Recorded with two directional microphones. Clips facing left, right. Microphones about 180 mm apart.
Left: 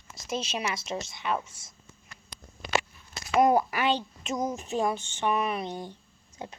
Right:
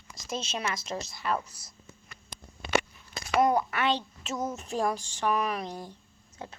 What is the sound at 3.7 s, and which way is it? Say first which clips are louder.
A child's voice: left 1 dB; 10° left (ahead or behind).